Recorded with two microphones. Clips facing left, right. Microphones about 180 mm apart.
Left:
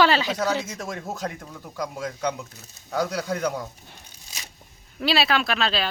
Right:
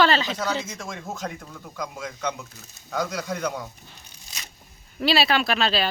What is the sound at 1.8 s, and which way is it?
Speech, 35° left (ahead or behind).